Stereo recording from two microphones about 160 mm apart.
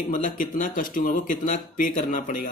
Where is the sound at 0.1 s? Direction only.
60° left (ahead or behind).